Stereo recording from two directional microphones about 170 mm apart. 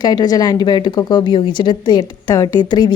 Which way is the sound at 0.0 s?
25° left (ahead or behind).